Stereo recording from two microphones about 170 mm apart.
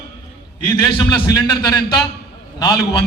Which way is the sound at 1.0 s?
25° left (ahead or behind).